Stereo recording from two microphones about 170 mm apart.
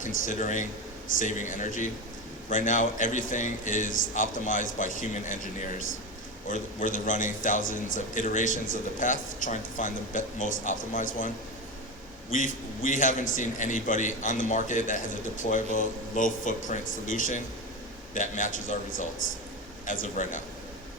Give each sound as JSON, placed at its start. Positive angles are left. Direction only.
{"t": 0.0, "sound": "a man's voice", "side_deg": 50}
{"t": 12.3, "sound": "a man's voice", "side_deg": 50}